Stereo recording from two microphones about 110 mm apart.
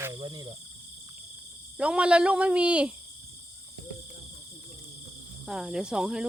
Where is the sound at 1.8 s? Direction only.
10° right (ahead or behind).